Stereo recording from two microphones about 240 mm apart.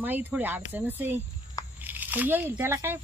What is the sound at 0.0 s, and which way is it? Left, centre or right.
Speech, centre.